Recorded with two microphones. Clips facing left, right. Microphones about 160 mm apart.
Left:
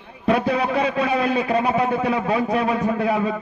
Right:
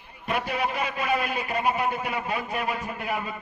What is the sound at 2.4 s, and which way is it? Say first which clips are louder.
Speech: left 9 dB; 85° left.